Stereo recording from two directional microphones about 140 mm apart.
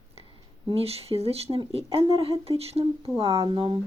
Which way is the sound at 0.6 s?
45° right (ahead or behind).